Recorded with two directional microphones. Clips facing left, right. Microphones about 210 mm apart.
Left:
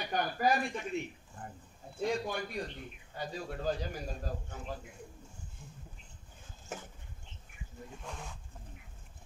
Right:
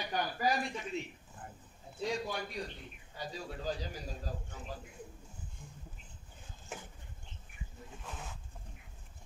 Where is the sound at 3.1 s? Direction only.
55° left (ahead or behind).